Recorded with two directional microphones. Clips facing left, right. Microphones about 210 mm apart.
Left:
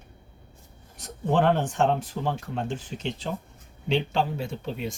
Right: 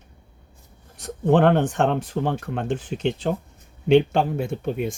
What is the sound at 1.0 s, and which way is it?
Speech, 60° right (ahead or behind).